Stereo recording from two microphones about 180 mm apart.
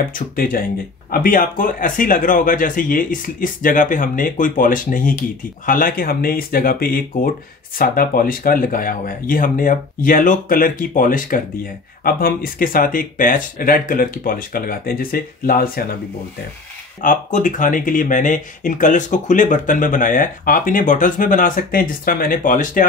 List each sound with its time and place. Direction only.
0.1 s speech: 50° left (ahead or behind)
17.0 s speech: 45° left (ahead or behind)